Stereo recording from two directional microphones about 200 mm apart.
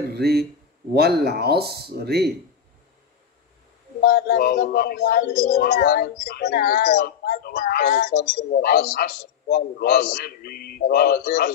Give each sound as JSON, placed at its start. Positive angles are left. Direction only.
{"t": 0.1, "sound": "speech", "side_deg": -55}
{"t": 4.0, "sound": "speech", "side_deg": 50}